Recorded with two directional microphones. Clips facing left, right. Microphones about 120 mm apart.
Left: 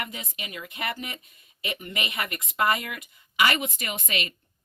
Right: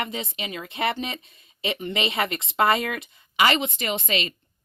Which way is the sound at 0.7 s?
90° right.